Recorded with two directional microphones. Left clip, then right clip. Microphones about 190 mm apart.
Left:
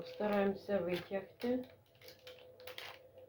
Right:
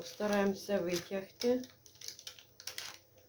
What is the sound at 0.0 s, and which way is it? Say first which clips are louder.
Speech: right 2 dB; 35° right (ahead or behind).